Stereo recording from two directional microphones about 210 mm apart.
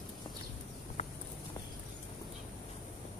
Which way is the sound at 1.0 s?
30° left (ahead or behind).